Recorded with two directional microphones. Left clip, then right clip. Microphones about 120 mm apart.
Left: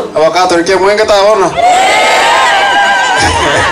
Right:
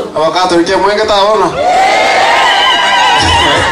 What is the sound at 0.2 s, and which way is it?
A man's voice, 35° left (ahead or behind).